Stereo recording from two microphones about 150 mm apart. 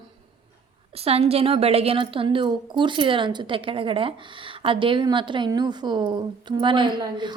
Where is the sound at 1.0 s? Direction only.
40° right (ahead or behind).